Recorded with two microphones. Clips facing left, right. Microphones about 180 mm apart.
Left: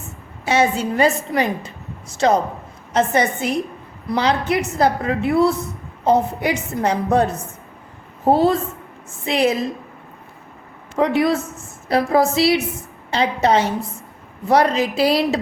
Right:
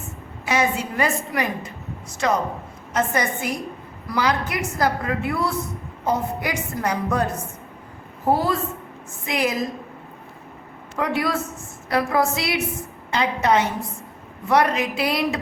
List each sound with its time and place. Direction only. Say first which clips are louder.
0.4 s a woman's voice: left 4 dB; 30° left (ahead or behind)
10.9 s a woman's voice: left 6 dB; 25° left (ahead or behind)